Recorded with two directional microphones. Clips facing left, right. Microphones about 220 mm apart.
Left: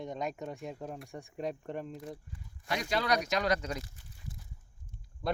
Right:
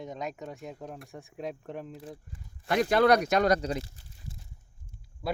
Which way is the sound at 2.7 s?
55° right (ahead or behind).